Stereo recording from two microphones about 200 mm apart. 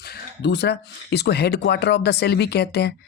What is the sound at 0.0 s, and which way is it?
Speech, 55° left (ahead or behind).